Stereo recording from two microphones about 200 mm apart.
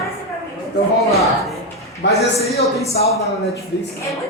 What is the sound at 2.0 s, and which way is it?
Speech, 60° left (ahead or behind).